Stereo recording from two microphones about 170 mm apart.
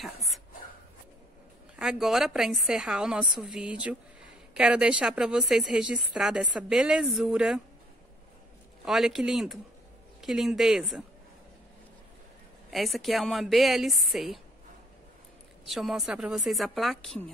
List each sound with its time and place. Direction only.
0.0 s a sound: centre (ahead or behind)
1.8 s speech: centre (ahead or behind)
8.8 s speech: centre (ahead or behind)
12.7 s speech: centre (ahead or behind)
15.7 s speech: centre (ahead or behind)